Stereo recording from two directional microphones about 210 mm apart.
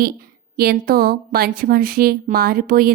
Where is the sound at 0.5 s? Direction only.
45° right (ahead or behind).